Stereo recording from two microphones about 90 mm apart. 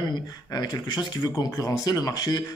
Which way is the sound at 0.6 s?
50° left (ahead or behind).